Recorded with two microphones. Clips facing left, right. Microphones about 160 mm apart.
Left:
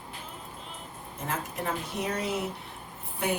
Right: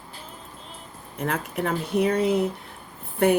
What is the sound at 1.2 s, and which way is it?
Speech, 65° right (ahead or behind).